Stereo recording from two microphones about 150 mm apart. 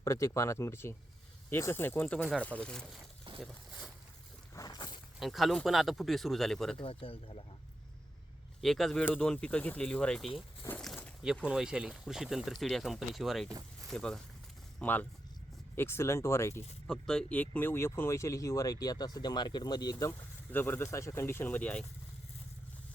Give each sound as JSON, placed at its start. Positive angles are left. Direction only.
{"t": 0.0, "sound": "speech", "side_deg": 20}
{"t": 4.5, "sound": "vehicle", "side_deg": 25}
{"t": 5.2, "sound": "speech", "side_deg": 0}
{"t": 6.7, "sound": "speech", "side_deg": 40}
{"t": 8.6, "sound": "speech", "side_deg": 0}
{"t": 10.8, "sound": "a sound", "side_deg": 5}
{"t": 11.4, "sound": "speech", "side_deg": -5}
{"t": 16.8, "sound": "speech", "side_deg": 5}